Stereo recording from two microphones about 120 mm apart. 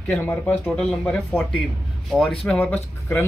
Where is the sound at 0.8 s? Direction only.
Centre (ahead or behind).